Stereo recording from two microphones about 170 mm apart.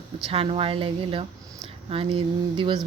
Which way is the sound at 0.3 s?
35° right (ahead or behind).